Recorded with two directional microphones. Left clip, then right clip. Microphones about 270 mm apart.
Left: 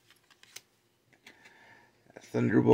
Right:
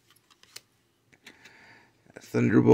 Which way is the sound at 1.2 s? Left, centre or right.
Centre.